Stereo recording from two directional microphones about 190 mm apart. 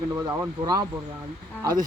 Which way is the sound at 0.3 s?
20° right (ahead or behind).